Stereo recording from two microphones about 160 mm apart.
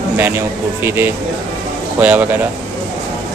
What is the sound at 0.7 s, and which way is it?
A man's voice, 15° right (ahead or behind).